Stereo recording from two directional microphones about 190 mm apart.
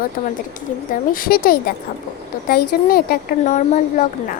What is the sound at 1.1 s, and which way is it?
Speech, 50° left (ahead or behind).